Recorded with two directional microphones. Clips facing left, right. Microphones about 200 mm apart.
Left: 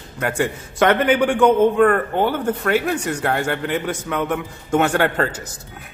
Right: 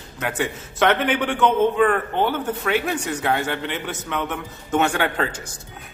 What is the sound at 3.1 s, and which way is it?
Speech, 5° right (ahead or behind).